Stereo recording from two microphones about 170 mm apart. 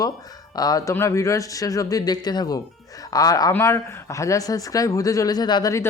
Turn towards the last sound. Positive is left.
turn(degrees=20)  # may be behind; listen again after turning